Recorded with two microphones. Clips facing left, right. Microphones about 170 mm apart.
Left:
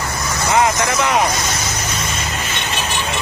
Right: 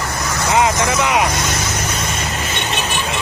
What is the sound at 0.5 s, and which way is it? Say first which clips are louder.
Vehicle: even; 20° right (ahead or behind).